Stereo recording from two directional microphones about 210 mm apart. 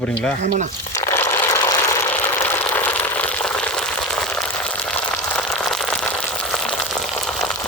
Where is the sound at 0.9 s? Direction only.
15° left (ahead or behind).